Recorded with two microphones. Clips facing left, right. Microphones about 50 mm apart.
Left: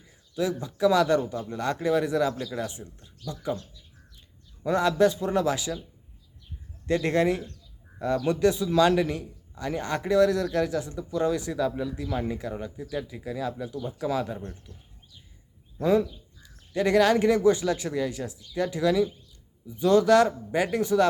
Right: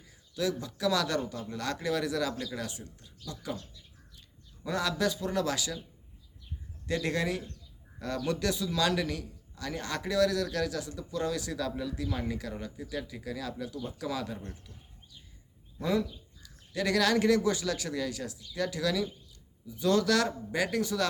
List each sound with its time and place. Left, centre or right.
0.1 s a man's voice: left
4.6 s a man's voice: left
6.8 s a man's voice: left
15.8 s a man's voice: left